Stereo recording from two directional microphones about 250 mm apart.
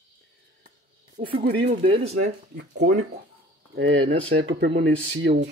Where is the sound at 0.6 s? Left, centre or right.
Right.